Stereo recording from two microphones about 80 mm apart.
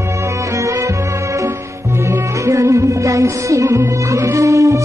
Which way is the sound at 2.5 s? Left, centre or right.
Right.